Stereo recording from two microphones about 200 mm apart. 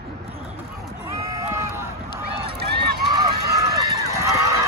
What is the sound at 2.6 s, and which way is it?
Run, 55° right (ahead or behind).